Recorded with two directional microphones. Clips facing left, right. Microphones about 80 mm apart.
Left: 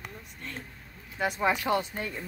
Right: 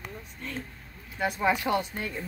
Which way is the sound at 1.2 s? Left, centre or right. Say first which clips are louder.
Right 1 dB; left.